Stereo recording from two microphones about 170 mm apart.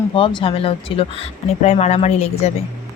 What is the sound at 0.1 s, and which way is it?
Speech, 30° left (ahead or behind).